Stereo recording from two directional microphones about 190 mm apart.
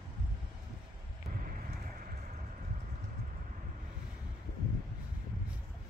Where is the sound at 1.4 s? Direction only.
45° right (ahead or behind).